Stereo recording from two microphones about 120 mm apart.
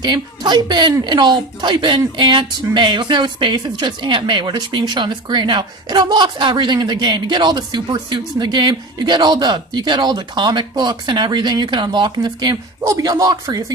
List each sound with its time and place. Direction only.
0.0 s a woman's voice: 40° right (ahead or behind)